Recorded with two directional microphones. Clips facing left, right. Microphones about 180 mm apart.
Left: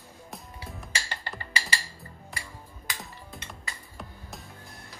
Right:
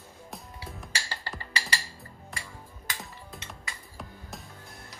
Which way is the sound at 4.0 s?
Centre (ahead or behind).